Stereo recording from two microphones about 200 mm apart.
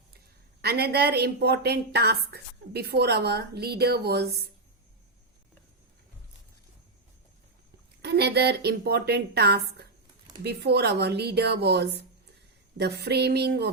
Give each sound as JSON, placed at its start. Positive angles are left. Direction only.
{"t": 0.6, "sound": "a woman's voice", "side_deg": -50}
{"t": 8.0, "sound": "a woman's voice", "side_deg": -55}